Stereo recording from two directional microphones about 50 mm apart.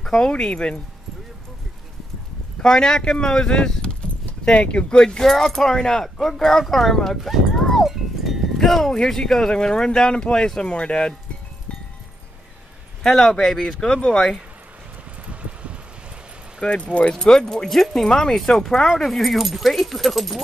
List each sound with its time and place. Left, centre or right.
0.0 s speech: centre
2.6 s speech: centre
7.2 s clip-clop: centre
7.8 s livestock: centre
8.9 s speech: centre
13.0 s speech: centre
15.2 s a sound: right
16.6 s speech: left
17.6 s speech: centre